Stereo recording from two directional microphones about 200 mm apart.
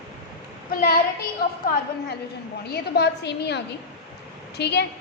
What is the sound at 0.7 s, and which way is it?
Speech, 45° left (ahead or behind).